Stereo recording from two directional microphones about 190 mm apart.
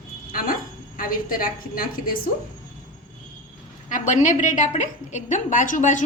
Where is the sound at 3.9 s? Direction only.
40° left (ahead or behind).